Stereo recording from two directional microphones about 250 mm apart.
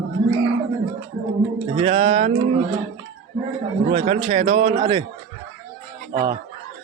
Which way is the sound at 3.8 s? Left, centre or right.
Right.